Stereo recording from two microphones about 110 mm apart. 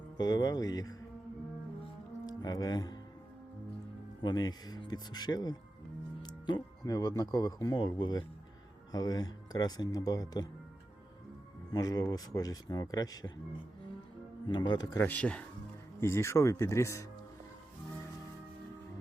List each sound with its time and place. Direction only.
0.2 s speech: 35° left (ahead or behind)
2.2 s speech: 35° left (ahead or behind)
4.2 s speech: 40° left (ahead or behind)
11.7 s speech: 35° left (ahead or behind)
14.4 s speech: 40° left (ahead or behind)
14.9 s speech: 15° left (ahead or behind)
16.0 s speech: 25° left (ahead or behind)